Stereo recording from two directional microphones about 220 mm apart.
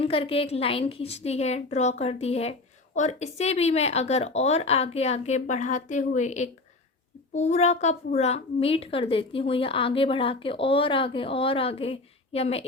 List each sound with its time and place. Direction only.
0.0 s a child's voice: 25° left (ahead or behind)